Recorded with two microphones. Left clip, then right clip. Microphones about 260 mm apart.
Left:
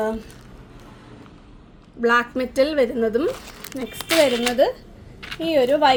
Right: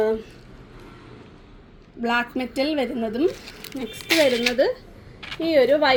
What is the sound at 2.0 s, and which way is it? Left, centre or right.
A woman's voice, left.